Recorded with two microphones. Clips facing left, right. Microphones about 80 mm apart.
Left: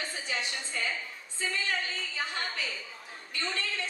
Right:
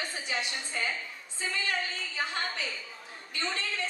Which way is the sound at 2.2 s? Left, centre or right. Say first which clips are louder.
Right 2 dB; right.